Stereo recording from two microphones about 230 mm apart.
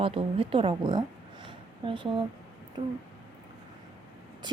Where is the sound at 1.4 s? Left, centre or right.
Right.